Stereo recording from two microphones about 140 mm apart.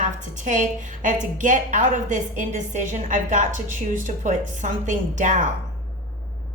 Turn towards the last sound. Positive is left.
turn(degrees=-60)  # may be behind; listen again after turning